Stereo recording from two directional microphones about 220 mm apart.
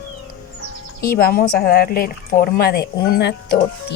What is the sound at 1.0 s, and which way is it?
Speech, 40° left (ahead or behind).